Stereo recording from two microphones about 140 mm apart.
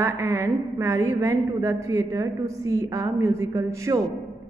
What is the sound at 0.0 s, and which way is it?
A woman's voice, 20° right (ahead or behind).